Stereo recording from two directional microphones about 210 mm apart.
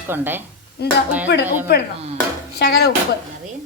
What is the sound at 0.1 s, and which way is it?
Dishes, 10° right (ahead or behind).